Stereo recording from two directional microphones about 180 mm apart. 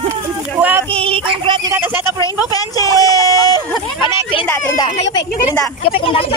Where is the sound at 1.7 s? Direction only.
10° right (ahead or behind).